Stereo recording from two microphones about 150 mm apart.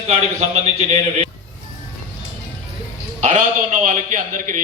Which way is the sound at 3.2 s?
50° right (ahead or behind).